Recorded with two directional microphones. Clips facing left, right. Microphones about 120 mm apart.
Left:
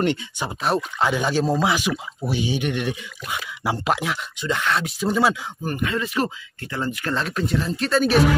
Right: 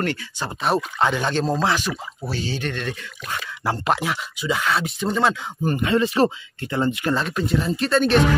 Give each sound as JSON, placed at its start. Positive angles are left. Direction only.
{"t": 0.0, "sound": "speech", "side_deg": 20}
{"t": 0.6, "sound": "speech", "side_deg": 0}
{"t": 5.7, "sound": "speech", "side_deg": -30}
{"t": 7.2, "sound": "speech", "side_deg": 0}